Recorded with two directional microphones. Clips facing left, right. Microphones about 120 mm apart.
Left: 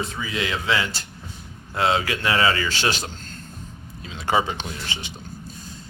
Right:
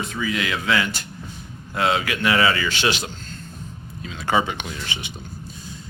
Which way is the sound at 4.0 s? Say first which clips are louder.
Right 1 dB; 25° left (ahead or behind).